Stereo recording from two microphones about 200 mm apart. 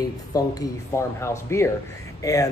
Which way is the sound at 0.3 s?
15° left (ahead or behind).